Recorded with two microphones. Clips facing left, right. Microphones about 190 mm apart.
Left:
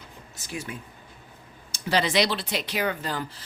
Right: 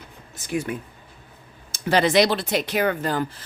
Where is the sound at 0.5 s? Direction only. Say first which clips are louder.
Right 9 dB; 55° right (ahead or behind).